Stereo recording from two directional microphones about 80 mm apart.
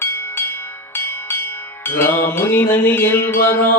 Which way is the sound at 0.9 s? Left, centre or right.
Left.